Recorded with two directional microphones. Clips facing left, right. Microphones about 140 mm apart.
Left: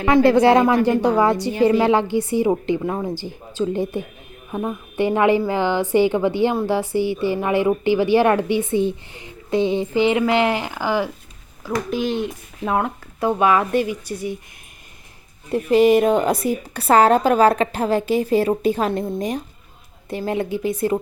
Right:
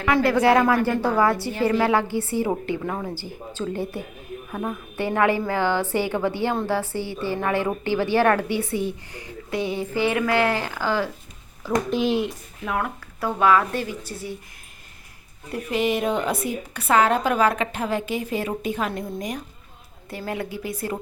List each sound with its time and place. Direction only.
0.0 s a woman's voice: 25° left (ahead or behind)
11.6 s speech: centre (ahead or behind)
12.6 s a woman's voice: 25° left (ahead or behind)
15.5 s a woman's voice: 35° left (ahead or behind)